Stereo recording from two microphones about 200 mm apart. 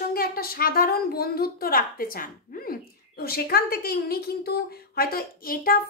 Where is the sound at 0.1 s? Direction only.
50° left (ahead or behind).